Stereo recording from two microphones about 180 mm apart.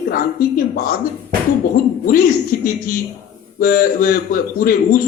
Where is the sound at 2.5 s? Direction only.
55° left (ahead or behind).